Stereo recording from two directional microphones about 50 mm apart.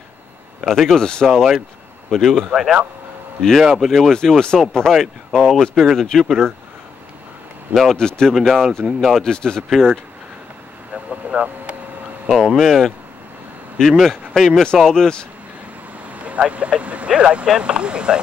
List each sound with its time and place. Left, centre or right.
0.7 s speech: centre
0.9 s speech: centre
4.9 s speech: centre
7.7 s speech: centre
11.1 s vehicle: right
12.3 s speech: centre
16.1 s vehicle: right
17.1 s speech: right